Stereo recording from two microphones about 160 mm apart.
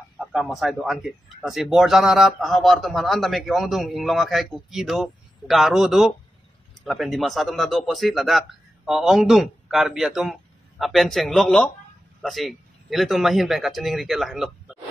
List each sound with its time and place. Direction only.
0.2 s speech: 5° right (ahead or behind)